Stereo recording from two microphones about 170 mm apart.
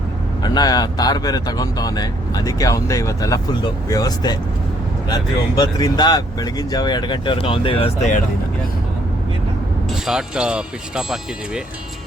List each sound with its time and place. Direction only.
0.4 s speech: 25° left (ahead or behind); by 8.2 s 40° left (ahead or behind)
9.9 s speech: 5° right (ahead or behind)